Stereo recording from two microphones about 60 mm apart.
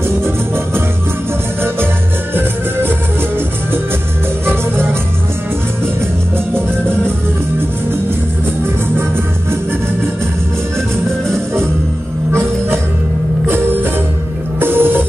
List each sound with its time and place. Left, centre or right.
2.3 s music: right
12.3 s music: right
14.6 s music: right